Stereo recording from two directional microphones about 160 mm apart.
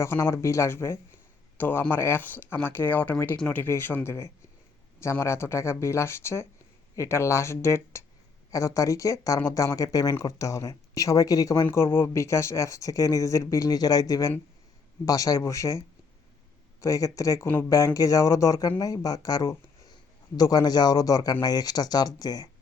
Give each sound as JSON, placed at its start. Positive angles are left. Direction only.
{"t": 0.0, "sound": "speech", "side_deg": 15}
{"t": 16.8, "sound": "speech", "side_deg": 20}